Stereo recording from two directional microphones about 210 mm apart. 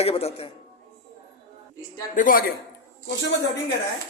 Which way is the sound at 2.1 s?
40° left (ahead or behind).